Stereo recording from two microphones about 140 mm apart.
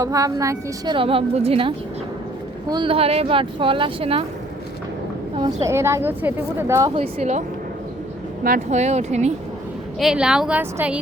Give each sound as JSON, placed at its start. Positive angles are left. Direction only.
{"t": 0.0, "sound": "a woman's voice", "side_deg": -25}
{"t": 0.9, "sound": "speech", "side_deg": -40}
{"t": 5.6, "sound": "a woman's voice", "side_deg": -20}
{"t": 6.9, "sound": "speech", "side_deg": -45}
{"t": 8.4, "sound": "speech", "side_deg": -60}
{"t": 10.0, "sound": "a woman's voice", "side_deg": -5}